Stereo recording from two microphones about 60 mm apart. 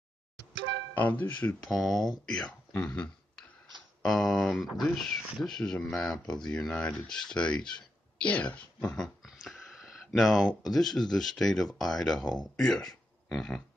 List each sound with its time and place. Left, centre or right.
0.9 s speech: left
1.7 s speech: centre
2.2 s speech: centre
4.0 s speech: centre; by 8.9 s left
9.2 s a sound: centre
10.6 s speech: centre